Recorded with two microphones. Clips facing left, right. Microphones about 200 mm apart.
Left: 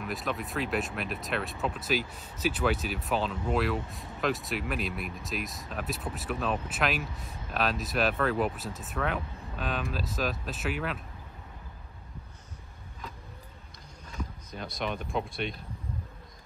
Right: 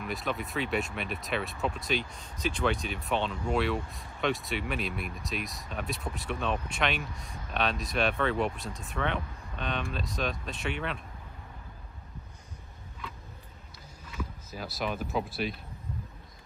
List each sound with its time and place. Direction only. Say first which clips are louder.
0.0 s speech: even; centre (ahead or behind)
13.0 s a sound: even; 40° left (ahead or behind)
14.5 s speech: even; 5° right (ahead or behind)